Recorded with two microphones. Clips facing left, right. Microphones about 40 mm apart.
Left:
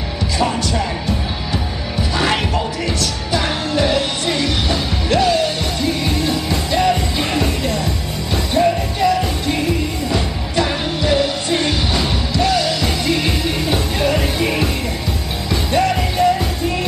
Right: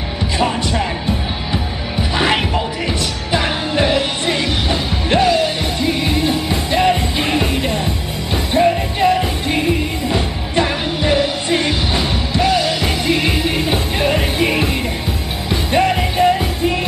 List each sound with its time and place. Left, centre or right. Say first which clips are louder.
0.4 s music: right 1 dB; right